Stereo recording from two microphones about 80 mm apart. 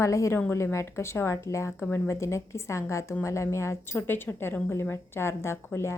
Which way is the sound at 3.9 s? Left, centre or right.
Left.